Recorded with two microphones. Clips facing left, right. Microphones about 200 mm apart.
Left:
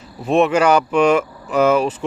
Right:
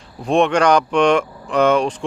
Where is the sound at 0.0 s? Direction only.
5° left (ahead or behind).